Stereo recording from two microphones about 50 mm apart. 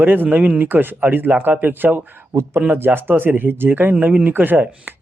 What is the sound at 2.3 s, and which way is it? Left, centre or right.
Speech, right.